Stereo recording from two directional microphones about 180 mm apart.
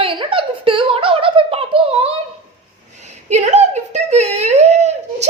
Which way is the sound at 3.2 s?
40° right (ahead or behind).